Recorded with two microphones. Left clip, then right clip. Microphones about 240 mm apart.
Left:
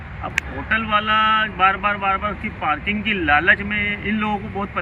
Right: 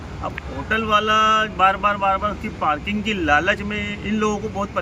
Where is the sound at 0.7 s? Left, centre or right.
Centre.